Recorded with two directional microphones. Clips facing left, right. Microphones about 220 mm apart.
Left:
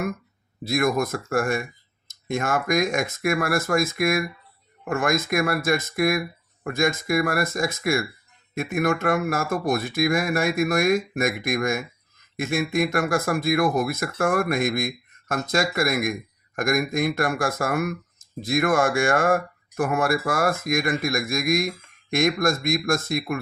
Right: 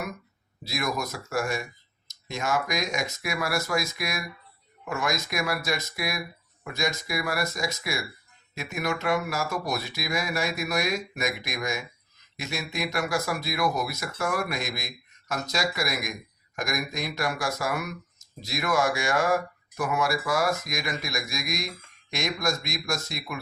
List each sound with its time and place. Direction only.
0.6 s speech: 50° left (ahead or behind)